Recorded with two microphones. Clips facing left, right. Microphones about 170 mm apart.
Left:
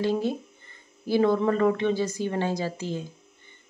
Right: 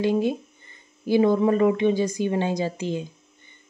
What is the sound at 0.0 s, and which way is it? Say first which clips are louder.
Speech: right 3 dB; 15° right (ahead or behind).